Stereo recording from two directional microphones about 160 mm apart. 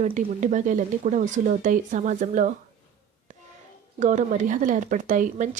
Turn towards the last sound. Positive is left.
turn(degrees=-50)  # may be behind; listen again after turning